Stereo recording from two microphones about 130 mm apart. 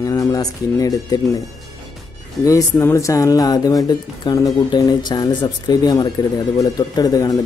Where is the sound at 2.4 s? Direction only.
25° left (ahead or behind).